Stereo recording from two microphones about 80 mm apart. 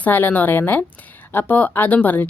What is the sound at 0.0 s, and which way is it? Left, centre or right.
Speech, left.